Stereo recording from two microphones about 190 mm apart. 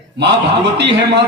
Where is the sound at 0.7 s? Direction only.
65° right (ahead or behind).